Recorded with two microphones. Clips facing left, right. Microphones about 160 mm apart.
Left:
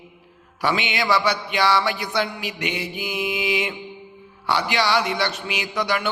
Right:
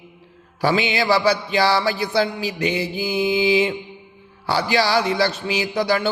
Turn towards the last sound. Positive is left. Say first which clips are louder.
# right 4 dB
turn(degrees=-30)  # may be behind; listen again after turning